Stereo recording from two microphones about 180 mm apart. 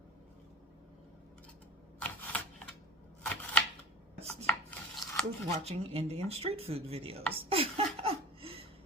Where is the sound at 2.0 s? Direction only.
10° left (ahead or behind).